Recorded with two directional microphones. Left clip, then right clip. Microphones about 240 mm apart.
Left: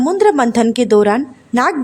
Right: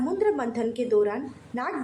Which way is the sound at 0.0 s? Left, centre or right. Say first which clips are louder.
Left 13 dB; left.